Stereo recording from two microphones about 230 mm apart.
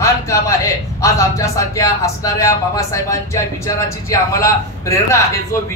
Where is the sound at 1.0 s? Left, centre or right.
Centre.